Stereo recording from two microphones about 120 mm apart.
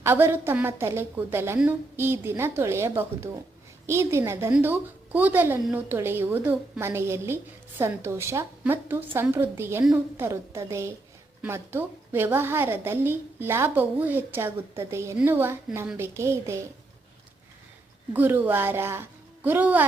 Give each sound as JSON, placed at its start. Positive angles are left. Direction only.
{"t": 0.0, "sound": "a woman's voice", "side_deg": -20}
{"t": 18.1, "sound": "a woman's voice", "side_deg": -15}